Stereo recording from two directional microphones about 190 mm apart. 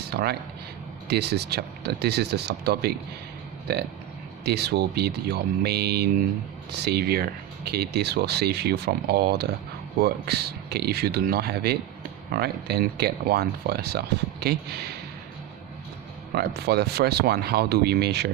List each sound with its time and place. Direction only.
0.1 s speech: 55° right (ahead or behind)
16.3 s speech: 55° right (ahead or behind)